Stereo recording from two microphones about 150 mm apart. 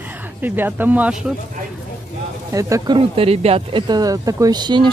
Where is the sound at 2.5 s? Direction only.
20° right (ahead or behind).